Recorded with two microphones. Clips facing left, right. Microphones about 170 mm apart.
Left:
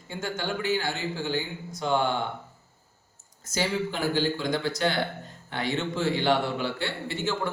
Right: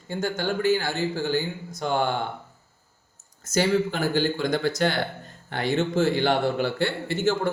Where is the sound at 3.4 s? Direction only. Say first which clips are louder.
Right 6 dB; 50° right (ahead or behind).